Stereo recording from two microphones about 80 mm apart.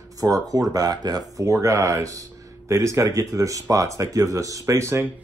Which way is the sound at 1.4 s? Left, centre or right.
Right.